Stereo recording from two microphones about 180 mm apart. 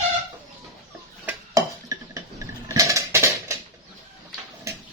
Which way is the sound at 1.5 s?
20° right (ahead or behind).